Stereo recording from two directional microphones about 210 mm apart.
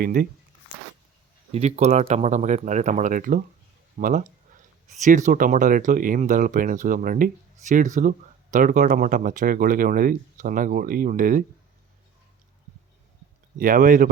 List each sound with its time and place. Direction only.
0.0 s speech: 45° right (ahead or behind)
1.5 s speech: 30° right (ahead or behind)
13.6 s speech: 40° right (ahead or behind)